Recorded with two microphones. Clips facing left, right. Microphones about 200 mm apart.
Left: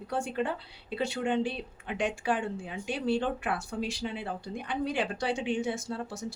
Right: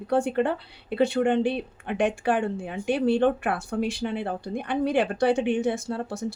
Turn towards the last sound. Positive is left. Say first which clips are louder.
# right 5 dB
turn(degrees=-55)  # may be behind; listen again after turning